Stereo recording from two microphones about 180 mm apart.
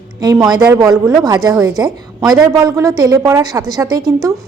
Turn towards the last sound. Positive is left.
turn(degrees=-20)  # may be behind; listen again after turning